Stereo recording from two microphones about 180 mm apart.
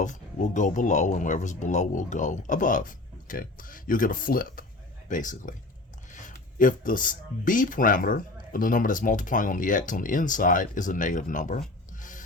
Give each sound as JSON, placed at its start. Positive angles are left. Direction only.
{"t": 0.0, "sound": "speech", "side_deg": 45}
{"t": 11.9, "sound": "rub", "side_deg": 45}